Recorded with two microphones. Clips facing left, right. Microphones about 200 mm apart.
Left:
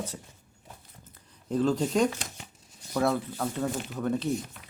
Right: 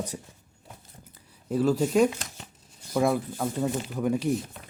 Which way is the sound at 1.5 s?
5° right (ahead or behind).